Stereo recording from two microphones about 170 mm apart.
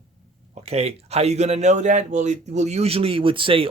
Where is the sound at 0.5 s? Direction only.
40° right (ahead or behind).